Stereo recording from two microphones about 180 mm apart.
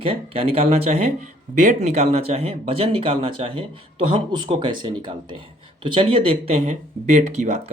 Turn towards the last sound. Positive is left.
turn(degrees=-40)  # may be behind; listen again after turning